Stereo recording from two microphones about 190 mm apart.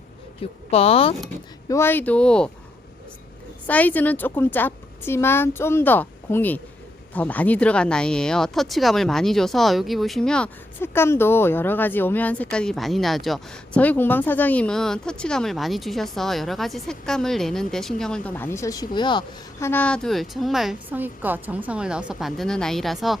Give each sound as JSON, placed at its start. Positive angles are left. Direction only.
{"t": 0.7, "sound": "speech", "side_deg": 30}
{"t": 1.6, "sound": "a woman's voice", "side_deg": 15}
{"t": 3.7, "sound": "a woman's voice", "side_deg": 10}
{"t": 19.6, "sound": "speech", "side_deg": 10}